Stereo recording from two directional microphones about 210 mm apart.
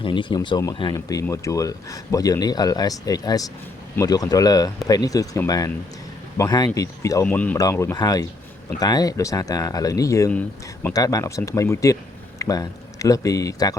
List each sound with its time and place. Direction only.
0.0 s speech: 25° left (ahead or behind)